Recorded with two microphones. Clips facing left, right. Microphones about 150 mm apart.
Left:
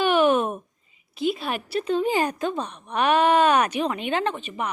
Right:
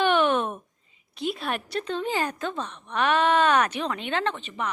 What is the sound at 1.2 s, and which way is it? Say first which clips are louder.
A woman's voice: left 3 dB; centre (ahead or behind).